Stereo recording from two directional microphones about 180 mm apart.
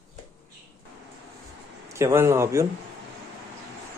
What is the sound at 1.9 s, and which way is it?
Speech, 15° right (ahead or behind).